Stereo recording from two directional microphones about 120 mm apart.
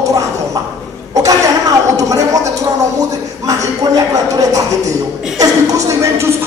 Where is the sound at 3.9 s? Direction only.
30° right (ahead or behind).